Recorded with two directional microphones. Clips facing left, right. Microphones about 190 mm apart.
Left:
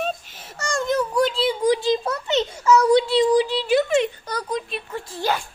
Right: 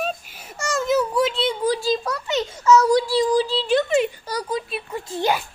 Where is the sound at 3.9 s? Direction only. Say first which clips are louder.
Even; 5° right (ahead or behind).